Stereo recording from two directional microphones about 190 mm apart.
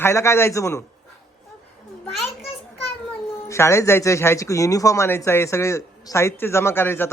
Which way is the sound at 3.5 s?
15° left (ahead or behind).